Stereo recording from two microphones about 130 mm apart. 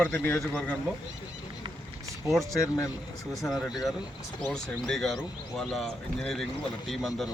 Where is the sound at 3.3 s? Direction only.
Centre (ahead or behind).